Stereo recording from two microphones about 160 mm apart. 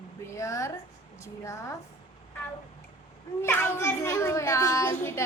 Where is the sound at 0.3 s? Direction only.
20° left (ahead or behind).